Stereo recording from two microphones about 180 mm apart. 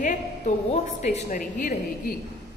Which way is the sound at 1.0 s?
45° left (ahead or behind).